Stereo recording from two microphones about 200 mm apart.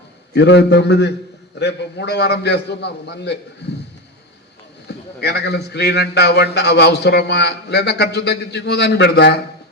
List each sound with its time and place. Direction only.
0.3 s a man's voice: 55° left (ahead or behind)
4.9 s a man's voice: 55° left (ahead or behind)